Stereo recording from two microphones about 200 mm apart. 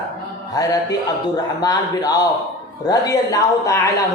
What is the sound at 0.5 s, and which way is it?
Speech, 20° left (ahead or behind).